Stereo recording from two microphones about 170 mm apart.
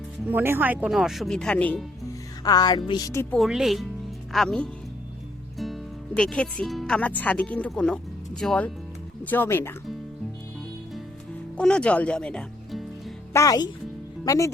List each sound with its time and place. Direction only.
0.3 s speech: 10° right (ahead or behind); by 1.8 s 10° left (ahead or behind)
2.4 s speech: 25° left (ahead or behind)
3.3 s speech: centre (ahead or behind)
11.5 s speech: 5° left (ahead or behind)
13.3 s speech: 20° left (ahead or behind)